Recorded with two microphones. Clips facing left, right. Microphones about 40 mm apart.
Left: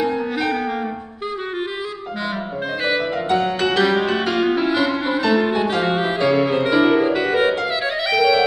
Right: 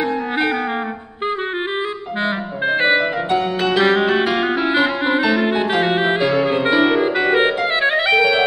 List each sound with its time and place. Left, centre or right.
0.0 s music: right
2.8 s music: right
3.3 s music: centre
4.0 s music: right
6.2 s music: centre
6.6 s clarinet: centre